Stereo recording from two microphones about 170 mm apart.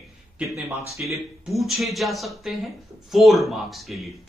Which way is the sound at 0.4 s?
Centre (ahead or behind).